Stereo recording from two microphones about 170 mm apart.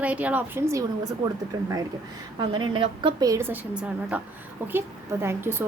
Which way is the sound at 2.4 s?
25° right (ahead or behind).